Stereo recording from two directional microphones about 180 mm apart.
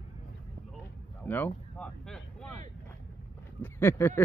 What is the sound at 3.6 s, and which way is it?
Speech, 15° left (ahead or behind).